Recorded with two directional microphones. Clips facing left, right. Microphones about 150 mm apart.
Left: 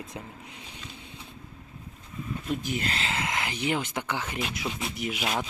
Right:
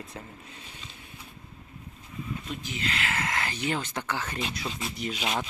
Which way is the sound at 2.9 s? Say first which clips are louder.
Even; 20° left (ahead or behind).